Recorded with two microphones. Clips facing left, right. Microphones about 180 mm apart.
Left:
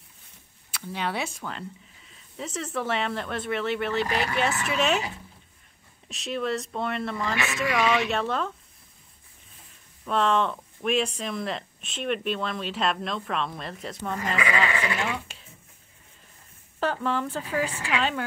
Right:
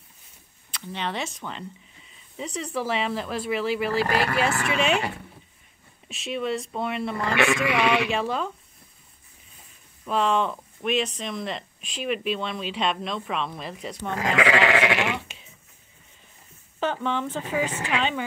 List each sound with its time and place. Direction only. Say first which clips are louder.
0.7 s speech: even; 5° left (ahead or behind)
6.0 s speech: right 1 dB; centre (ahead or behind)
7.3 s speech: right 5 dB; 65° right (ahead or behind)
8.1 s speech: right 1 dB; centre (ahead or behind)
10.0 s speech: even; 5° right (ahead or behind)
14.1 s speech: right 5 dB; 90° right
16.8 s speech: even; centre (ahead or behind)